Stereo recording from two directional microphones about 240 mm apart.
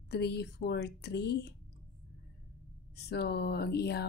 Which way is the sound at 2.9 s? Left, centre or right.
Left.